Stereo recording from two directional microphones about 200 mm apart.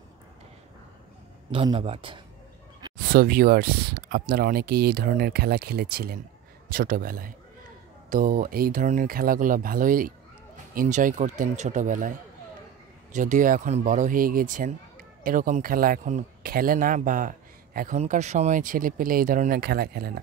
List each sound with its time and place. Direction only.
1.5 s speech: 25° right (ahead or behind)
3.1 s speech: 45° right (ahead or behind)
13.1 s speech: 40° right (ahead or behind)